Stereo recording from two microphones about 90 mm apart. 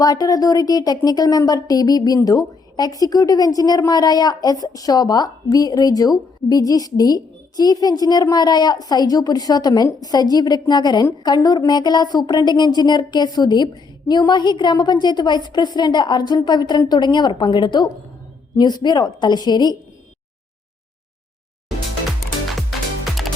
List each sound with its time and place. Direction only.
0.0 s speech: 45° left (ahead or behind)
22.7 s music: centre (ahead or behind)